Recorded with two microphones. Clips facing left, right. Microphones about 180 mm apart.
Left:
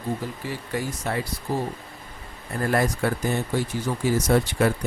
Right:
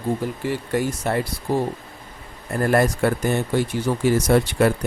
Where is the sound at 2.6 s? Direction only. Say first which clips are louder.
Right 4 dB; 55° right (ahead or behind).